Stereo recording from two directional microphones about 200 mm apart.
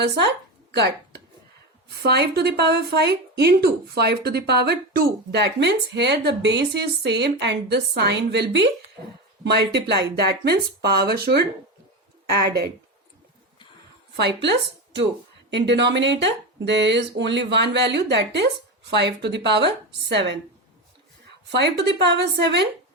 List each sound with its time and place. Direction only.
0.0 s speech: 55° right (ahead or behind)
14.2 s speech: 60° right (ahead or behind)
21.5 s speech: 60° right (ahead or behind)